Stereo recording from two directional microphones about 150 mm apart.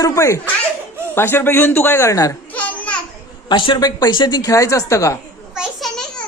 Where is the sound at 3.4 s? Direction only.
30° left (ahead or behind).